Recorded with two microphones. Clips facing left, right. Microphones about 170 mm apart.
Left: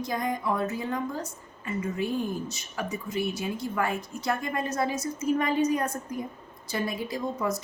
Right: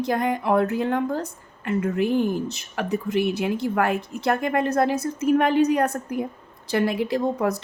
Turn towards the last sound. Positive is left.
turn(degrees=-60)  # may be behind; listen again after turning